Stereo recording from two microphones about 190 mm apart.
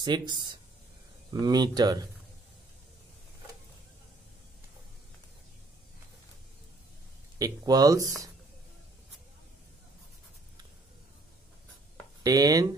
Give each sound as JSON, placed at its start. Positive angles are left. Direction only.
{"t": 0.0, "sound": "speech", "side_deg": -25}
{"t": 7.3, "sound": "speech", "side_deg": -20}
{"t": 12.2, "sound": "speech", "side_deg": -20}